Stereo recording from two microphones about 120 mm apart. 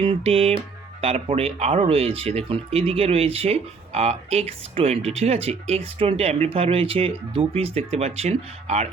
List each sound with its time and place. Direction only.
0.0 s music: 55° right (ahead or behind)
1.0 s speech: 55° right (ahead or behind)